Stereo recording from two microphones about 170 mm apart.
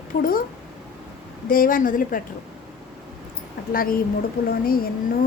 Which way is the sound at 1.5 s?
55° left (ahead or behind).